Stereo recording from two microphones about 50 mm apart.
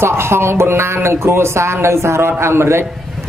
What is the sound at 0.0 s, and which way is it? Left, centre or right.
A man's voice, right.